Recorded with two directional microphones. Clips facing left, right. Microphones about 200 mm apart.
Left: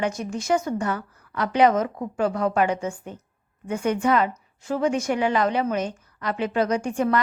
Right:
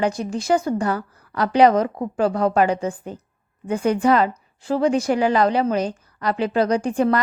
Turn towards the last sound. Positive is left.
turn(degrees=-35)  # may be behind; listen again after turning